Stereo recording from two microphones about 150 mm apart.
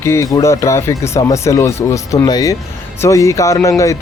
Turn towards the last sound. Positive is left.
turn(degrees=20)  # may be behind; listen again after turning